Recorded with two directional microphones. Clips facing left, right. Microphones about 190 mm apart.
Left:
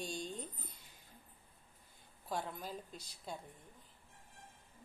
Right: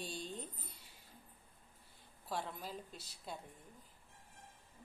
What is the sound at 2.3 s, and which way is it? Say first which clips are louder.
A woman's voice: left 1 dB; centre (ahead or behind).